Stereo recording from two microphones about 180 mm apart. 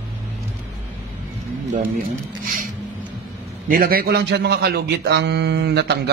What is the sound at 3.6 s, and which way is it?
A man's voice, 50° right (ahead or behind).